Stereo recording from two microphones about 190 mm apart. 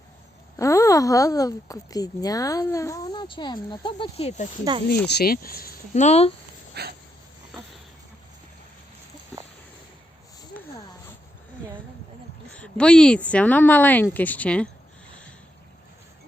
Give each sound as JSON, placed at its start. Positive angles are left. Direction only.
{"t": 0.6, "sound": "speech", "side_deg": 15}
{"t": 5.0, "sound": "speech", "side_deg": 55}
{"t": 6.8, "sound": "dog", "side_deg": -60}
{"t": 7.5, "sound": "a sound", "side_deg": 0}
{"t": 10.5, "sound": "a sound", "side_deg": 10}
{"t": 12.5, "sound": "speech", "side_deg": 5}